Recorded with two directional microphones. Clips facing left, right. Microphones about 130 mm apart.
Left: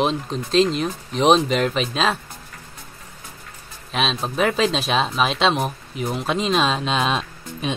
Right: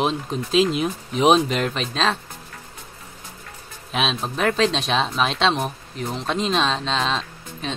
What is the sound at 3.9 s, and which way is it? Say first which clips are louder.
Speech: left 1 dB; centre (ahead or behind).